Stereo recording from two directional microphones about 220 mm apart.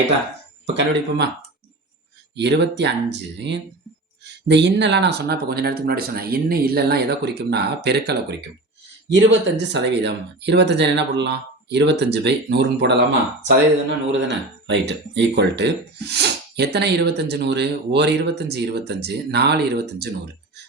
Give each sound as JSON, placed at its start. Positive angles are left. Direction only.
{"t": 0.8, "sound": "speech", "side_deg": -50}
{"t": 2.3, "sound": "speech", "side_deg": -50}
{"t": 14.1, "sound": "speech", "side_deg": -55}